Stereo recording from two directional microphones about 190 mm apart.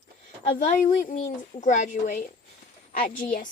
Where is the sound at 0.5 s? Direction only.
40° left (ahead or behind).